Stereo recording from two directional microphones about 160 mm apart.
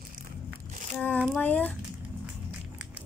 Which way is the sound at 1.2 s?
5° left (ahead or behind).